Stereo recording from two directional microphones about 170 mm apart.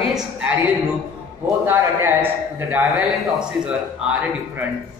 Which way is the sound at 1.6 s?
15° right (ahead or behind).